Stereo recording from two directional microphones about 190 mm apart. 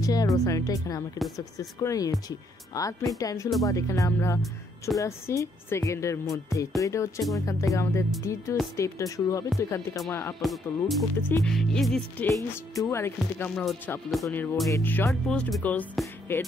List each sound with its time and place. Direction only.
0.0 s speech: 20° left (ahead or behind)
10.4 s speech: centre (ahead or behind)
12.3 s speech: 15° left (ahead or behind)